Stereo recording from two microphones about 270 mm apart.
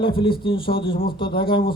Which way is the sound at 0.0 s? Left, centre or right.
Centre.